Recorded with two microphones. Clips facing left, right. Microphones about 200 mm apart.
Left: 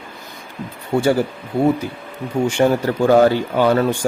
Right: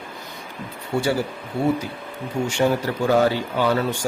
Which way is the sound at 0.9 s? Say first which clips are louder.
Left 5 dB; 55° left (ahead or behind).